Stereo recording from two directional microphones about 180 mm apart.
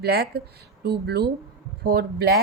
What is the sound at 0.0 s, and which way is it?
A woman's voice, 60° right (ahead or behind).